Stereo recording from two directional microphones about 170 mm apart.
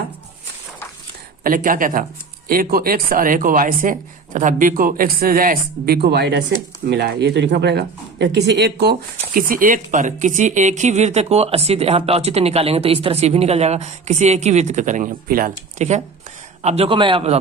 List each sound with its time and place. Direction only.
1.5 s speech: 55° right (ahead or behind)
16.6 s a man's voice: 35° right (ahead or behind)